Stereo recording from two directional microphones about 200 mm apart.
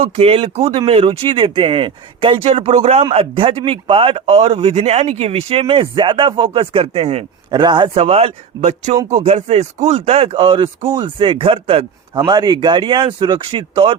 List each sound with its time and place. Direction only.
0.0 s speech: 30° right (ahead or behind)